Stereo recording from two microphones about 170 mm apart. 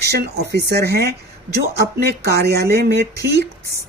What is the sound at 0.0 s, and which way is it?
Speech, 75° right (ahead or behind).